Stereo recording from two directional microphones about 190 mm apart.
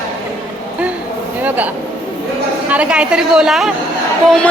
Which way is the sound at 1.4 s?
10° right (ahead or behind).